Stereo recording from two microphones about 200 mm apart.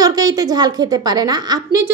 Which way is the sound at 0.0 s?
20° right (ahead or behind).